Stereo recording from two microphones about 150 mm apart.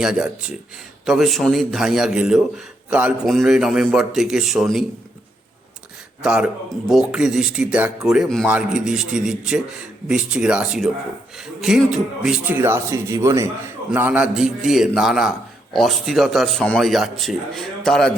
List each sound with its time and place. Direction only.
0.0 s a man's voice: 5° right (ahead or behind)
6.2 s a man's voice: 5° right (ahead or behind)
12.5 s a man's voice: 15° right (ahead or behind); by 18.2 s 5° left (ahead or behind)